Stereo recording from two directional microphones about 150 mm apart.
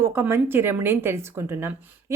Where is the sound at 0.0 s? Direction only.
15° right (ahead or behind).